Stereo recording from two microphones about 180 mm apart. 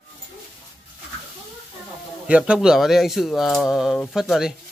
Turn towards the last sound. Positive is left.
turn(degrees=0)  # may be behind; listen again after turning